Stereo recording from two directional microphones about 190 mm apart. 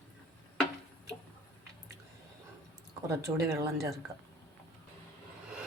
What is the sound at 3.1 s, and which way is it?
Speech, 15° right (ahead or behind).